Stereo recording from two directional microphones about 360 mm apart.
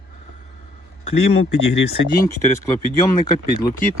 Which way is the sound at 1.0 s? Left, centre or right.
Centre.